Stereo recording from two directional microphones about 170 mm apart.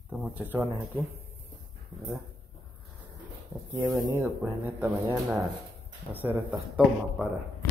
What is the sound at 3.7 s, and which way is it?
Speech, 20° right (ahead or behind).